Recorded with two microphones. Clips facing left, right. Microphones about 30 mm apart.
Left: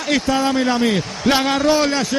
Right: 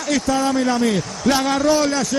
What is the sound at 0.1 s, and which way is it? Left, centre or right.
Speech, left.